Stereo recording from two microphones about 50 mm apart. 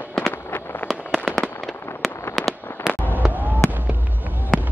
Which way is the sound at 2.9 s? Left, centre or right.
Centre.